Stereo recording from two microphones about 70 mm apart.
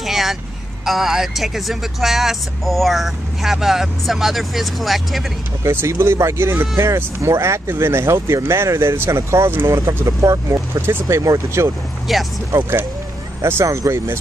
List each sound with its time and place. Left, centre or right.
0.0 s vehicle: centre
0.8 s speech: centre
5.7 s speech: right
12.1 s speech: centre
12.5 s speech: right